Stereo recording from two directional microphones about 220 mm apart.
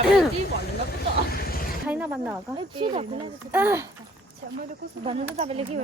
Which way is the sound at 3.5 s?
10° right (ahead or behind).